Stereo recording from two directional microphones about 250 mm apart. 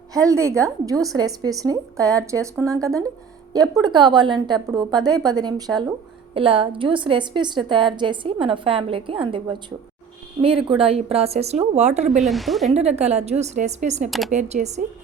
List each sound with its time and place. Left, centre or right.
0.1 s a woman's voice: centre
12.2 s speech: centre
13.0 s a woman's voice: right